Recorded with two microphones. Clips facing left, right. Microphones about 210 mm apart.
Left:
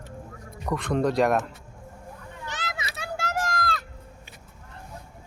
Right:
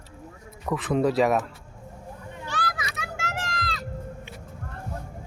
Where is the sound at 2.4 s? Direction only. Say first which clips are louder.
Right 4 dB; 20° left (ahead or behind); by 3.8 s 50° left (ahead or behind).